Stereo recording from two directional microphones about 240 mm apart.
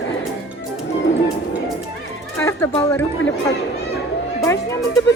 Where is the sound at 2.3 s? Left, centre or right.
Centre.